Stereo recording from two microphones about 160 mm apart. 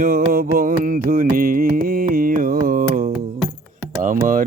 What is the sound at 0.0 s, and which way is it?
Music, 60° right (ahead or behind).